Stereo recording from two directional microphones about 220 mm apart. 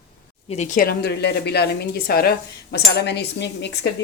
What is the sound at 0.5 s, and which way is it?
Speech, 35° left (ahead or behind).